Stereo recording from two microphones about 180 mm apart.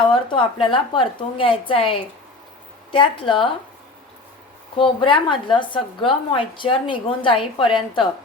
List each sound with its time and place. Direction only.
0.1 s a woman's voice: 30° left (ahead or behind)
4.8 s a woman's voice: 30° left (ahead or behind)